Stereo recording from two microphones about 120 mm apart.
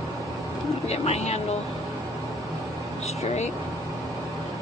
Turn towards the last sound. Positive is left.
turn(degrees=70)  # may be behind; listen again after turning